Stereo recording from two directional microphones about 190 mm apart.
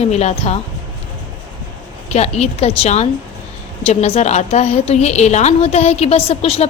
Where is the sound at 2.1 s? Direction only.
35° left (ahead or behind).